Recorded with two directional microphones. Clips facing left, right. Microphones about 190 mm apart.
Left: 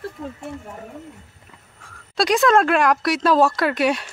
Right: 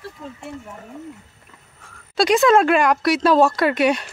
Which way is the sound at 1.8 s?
Centre (ahead or behind).